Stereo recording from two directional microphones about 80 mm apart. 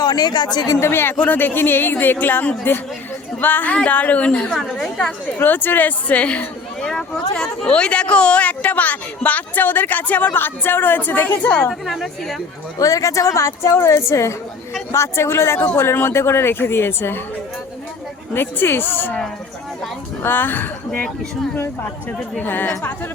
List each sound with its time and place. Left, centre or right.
0.0 s speech: left
0.8 s a woman's voice: left
4.5 s a woman's voice: centre
5.4 s speech: left
11.7 s speech: centre
12.8 s a woman's voice: left
18.3 s speech: left
20.2 s speech: left
22.4 s speech: left